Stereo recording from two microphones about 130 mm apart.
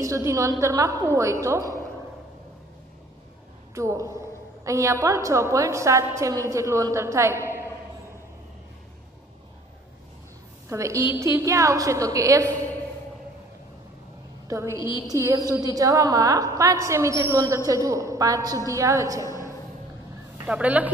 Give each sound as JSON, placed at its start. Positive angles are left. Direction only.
{"t": 0.0, "sound": "a woman's voice", "side_deg": -25}
{"t": 3.7, "sound": "a woman's voice", "side_deg": -25}
{"t": 10.7, "sound": "a woman's voice", "side_deg": -25}
{"t": 14.5, "sound": "a woman's voice", "side_deg": -20}
{"t": 14.8, "sound": "a woman's voice", "side_deg": 40}
{"t": 15.0, "sound": "a woman's voice", "side_deg": -25}
{"t": 20.4, "sound": "speech", "side_deg": -10}